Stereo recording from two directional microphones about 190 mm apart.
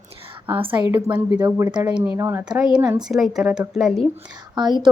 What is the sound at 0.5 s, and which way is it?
Speech, 25° right (ahead or behind).